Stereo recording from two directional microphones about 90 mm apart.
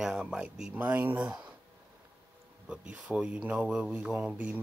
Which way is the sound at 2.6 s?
15° right (ahead or behind).